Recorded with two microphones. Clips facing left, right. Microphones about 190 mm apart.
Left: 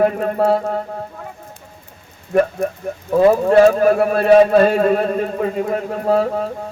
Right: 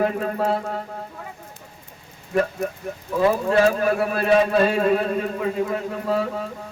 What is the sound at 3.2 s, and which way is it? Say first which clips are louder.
A man's voice: left 7 dB; 40° left (ahead or behind).